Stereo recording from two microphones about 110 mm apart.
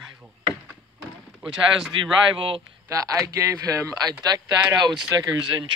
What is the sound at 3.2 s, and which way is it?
Speech, 30° right (ahead or behind).